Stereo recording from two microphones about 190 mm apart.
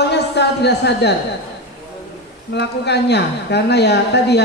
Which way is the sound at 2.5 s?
60° left (ahead or behind).